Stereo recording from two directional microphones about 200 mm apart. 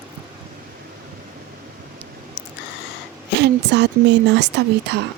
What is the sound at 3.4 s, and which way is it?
A woman's voice, 60° right (ahead or behind).